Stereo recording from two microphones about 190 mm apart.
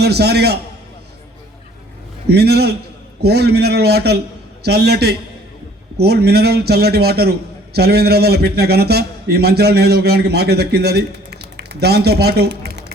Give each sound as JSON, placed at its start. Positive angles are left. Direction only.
{"t": 0.0, "sound": "a man's voice", "side_deg": -60}
{"t": 2.2, "sound": "a man's voice", "side_deg": -60}